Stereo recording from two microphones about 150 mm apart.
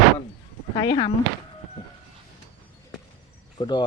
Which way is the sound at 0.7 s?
30° left (ahead or behind).